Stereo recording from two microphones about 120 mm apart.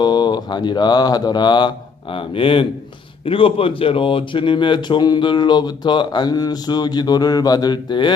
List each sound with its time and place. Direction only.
0.0 s speech: 35° left (ahead or behind)